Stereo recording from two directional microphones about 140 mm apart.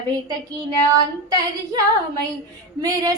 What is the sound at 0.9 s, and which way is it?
Speech, 25° right (ahead or behind).